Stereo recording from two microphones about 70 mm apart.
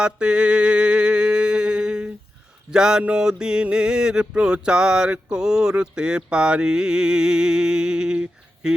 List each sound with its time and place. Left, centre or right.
0.0 s mantra: centre
2.6 s a sound: centre
8.6 s speech: centre